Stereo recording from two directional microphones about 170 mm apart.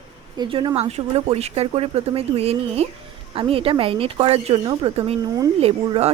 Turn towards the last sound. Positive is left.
turn(degrees=-35)  # may be behind; listen again after turning